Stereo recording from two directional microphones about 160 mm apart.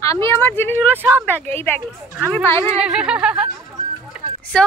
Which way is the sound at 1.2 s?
10° left (ahead or behind).